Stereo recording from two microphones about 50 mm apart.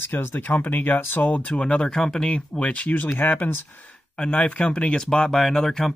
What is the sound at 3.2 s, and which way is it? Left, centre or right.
Speech, left.